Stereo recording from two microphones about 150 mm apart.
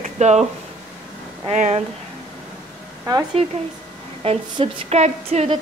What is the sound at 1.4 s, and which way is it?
Speech, 45° right (ahead or behind).